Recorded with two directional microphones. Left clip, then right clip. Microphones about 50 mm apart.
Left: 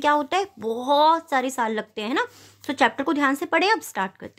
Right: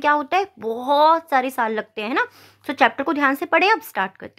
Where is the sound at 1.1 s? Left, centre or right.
Right.